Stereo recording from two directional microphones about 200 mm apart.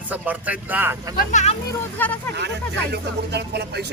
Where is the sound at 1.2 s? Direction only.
40° left (ahead or behind).